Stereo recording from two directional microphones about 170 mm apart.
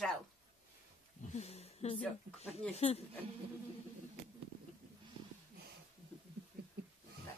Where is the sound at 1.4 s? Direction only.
40° left (ahead or behind).